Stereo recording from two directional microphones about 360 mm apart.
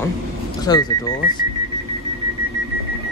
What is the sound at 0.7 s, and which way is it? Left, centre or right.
Speech, centre.